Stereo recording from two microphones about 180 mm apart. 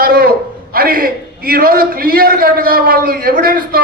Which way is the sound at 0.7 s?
55° right (ahead or behind).